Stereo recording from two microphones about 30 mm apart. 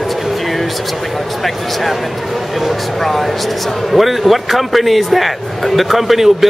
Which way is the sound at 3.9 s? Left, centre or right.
Centre.